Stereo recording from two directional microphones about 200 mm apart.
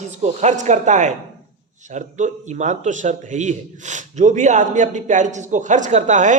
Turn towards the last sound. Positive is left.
turn(degrees=-40)  # may be behind; listen again after turning